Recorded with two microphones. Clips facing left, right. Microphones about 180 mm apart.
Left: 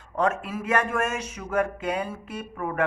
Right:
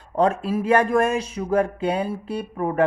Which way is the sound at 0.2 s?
35° right (ahead or behind).